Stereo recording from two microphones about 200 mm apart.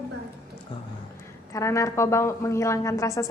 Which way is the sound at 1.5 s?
15° left (ahead or behind).